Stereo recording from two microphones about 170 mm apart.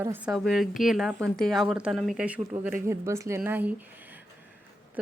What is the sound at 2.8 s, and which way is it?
Speech, 15° right (ahead or behind).